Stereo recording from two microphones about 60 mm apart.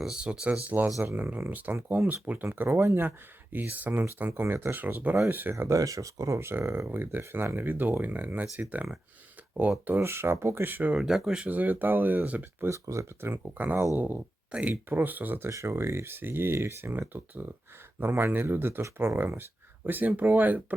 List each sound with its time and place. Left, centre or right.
0.0 s speech: centre
1.0 s speech: right
1.5 s speech: right
2.4 s speech: right
3.5 s speech: right
5.6 s speech: right
6.4 s speech: right
10.0 s speech: right
10.9 s speech: centre
11.4 s speech: right
12.7 s speech: right
13.3 s speech: right
15.4 s speech: right